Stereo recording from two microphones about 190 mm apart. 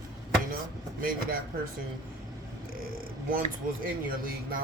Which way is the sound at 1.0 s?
50° right (ahead or behind).